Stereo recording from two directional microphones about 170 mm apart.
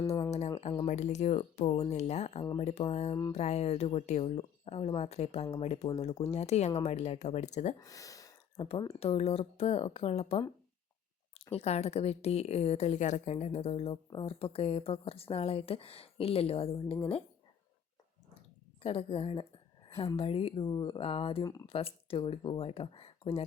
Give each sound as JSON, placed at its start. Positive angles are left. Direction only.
{"t": 0.1, "sound": "a sound", "side_deg": 35}
{"t": 0.6, "sound": "speech", "side_deg": 30}
{"t": 0.9, "sound": "speech", "side_deg": 45}
{"t": 3.3, "sound": "speech", "side_deg": 40}
{"t": 7.8, "sound": "speech", "side_deg": 20}
{"t": 8.5, "sound": "speech", "side_deg": 35}
{"t": 11.5, "sound": "speech", "side_deg": 40}
{"t": 18.8, "sound": "speech", "side_deg": 35}